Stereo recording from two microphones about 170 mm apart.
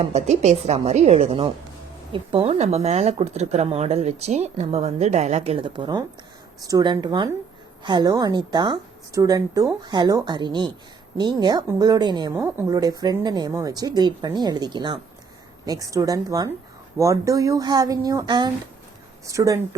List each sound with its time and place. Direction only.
0.0 s a woman's voice: 40° right (ahead or behind)
12.4 s a woman's voice: 10° right (ahead or behind)
12.7 s a woman's voice: 25° right (ahead or behind)